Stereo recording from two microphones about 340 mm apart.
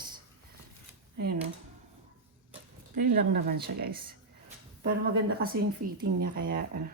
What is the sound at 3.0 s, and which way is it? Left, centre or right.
Speech, right.